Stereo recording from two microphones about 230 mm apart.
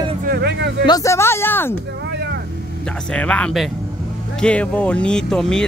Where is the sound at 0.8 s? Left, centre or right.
Centre.